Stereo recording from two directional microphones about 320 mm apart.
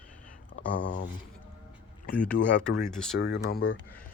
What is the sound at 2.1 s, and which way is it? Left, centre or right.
Speech, centre.